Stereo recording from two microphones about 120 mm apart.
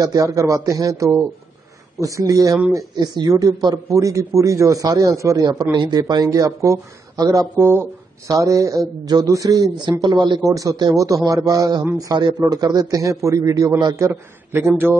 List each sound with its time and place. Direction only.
0.0 s a man's voice: 30° right (ahead or behind)